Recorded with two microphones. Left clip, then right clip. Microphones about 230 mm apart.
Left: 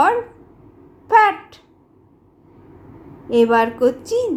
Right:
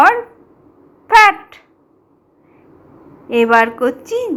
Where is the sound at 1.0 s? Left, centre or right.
Centre.